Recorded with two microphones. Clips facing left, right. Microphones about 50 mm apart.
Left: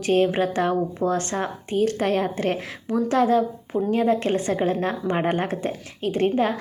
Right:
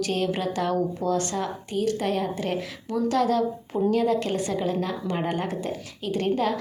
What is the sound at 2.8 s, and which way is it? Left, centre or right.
Speech, left.